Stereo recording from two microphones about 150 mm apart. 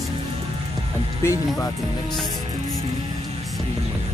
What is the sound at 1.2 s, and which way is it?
Speech, 20° left (ahead or behind).